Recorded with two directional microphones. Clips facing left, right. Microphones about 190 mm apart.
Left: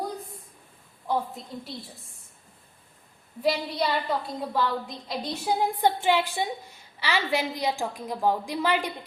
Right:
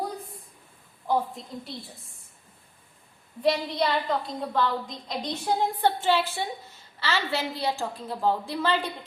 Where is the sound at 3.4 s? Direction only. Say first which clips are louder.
Right 1 dB; 5° left (ahead or behind).